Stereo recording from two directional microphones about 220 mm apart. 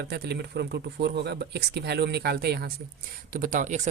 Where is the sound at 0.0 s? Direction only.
45° right (ahead or behind).